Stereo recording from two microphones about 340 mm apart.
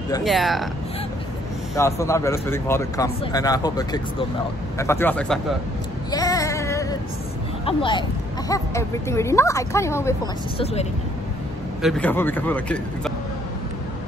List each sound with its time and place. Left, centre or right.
0.2 s a man's voice: centre
1.8 s speech: centre
6.1 s female singing: centre
7.6 s speech: centre
10.6 s speech: centre
11.8 s a man's voice: centre